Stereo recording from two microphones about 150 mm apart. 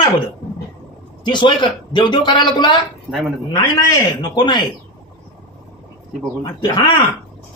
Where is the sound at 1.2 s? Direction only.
30° left (ahead or behind).